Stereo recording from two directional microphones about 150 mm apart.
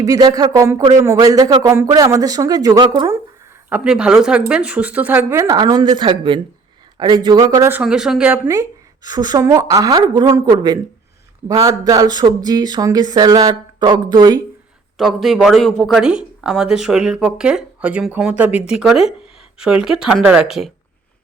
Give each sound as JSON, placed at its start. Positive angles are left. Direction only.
{"t": 0.0, "sound": "speech", "side_deg": -25}
{"t": 3.7, "sound": "speech", "side_deg": -5}
{"t": 7.8, "sound": "speech", "side_deg": -5}
{"t": 9.0, "sound": "speech", "side_deg": -25}
{"t": 14.9, "sound": "speech", "side_deg": 0}